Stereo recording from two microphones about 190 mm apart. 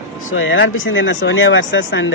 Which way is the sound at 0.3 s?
90° left.